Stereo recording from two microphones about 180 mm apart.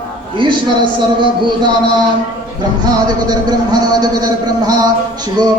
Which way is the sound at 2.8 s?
20° right (ahead or behind).